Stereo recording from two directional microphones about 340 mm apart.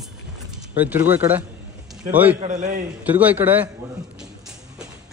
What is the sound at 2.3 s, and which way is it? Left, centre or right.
Speech, right.